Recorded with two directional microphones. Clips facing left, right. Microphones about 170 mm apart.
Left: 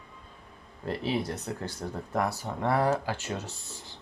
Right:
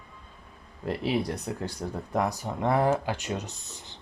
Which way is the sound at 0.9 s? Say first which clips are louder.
Right 2 dB; 15° right (ahead or behind).